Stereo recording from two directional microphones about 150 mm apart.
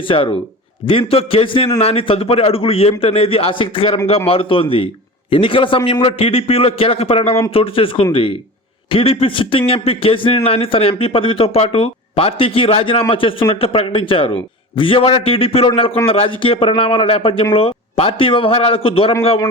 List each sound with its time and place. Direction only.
0.1 s a man's voice: 35° left (ahead or behind)